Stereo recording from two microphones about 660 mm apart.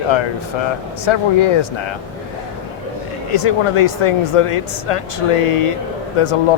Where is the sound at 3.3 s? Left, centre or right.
Left.